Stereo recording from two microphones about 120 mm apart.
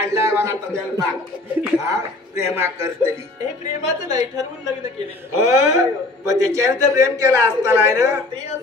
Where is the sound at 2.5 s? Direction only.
20° right (ahead or behind).